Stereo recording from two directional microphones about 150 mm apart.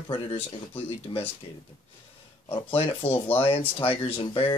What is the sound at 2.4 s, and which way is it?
Speech, 35° left (ahead or behind).